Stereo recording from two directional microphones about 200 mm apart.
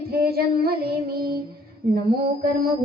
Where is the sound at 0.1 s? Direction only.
50° right (ahead or behind).